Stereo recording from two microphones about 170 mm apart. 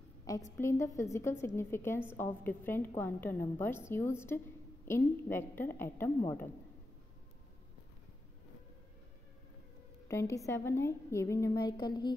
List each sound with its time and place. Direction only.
0.3 s a woman's voice: 20° left (ahead or behind)
10.0 s a woman's voice: 15° left (ahead or behind)